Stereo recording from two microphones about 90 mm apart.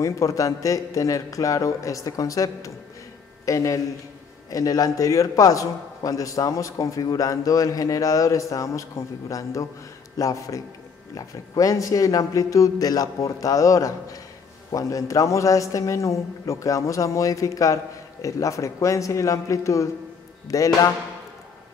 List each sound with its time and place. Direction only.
0.0 s a man's voice: 35° left (ahead or behind)